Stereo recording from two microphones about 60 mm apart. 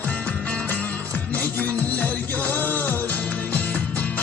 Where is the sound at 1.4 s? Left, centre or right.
Left.